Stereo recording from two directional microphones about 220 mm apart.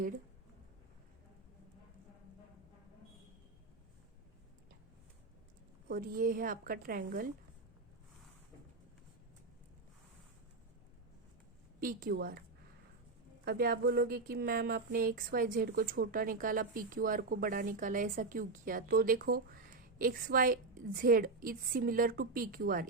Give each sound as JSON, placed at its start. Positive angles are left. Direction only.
{"t": 5.9, "sound": "speech", "side_deg": -40}
{"t": 11.8, "sound": "speech", "side_deg": -40}
{"t": 13.4, "sound": "speech", "side_deg": -45}